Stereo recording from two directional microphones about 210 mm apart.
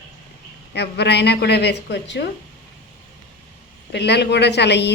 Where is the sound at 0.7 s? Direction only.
55° left (ahead or behind).